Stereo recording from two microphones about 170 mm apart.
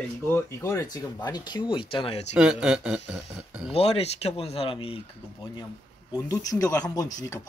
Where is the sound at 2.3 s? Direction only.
5° right (ahead or behind).